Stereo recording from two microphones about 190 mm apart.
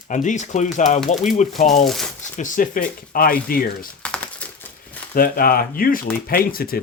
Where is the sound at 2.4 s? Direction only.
45° left (ahead or behind).